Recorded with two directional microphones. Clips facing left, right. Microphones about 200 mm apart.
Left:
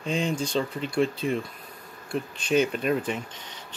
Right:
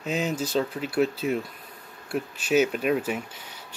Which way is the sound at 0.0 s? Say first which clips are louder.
Even; 5° right (ahead or behind).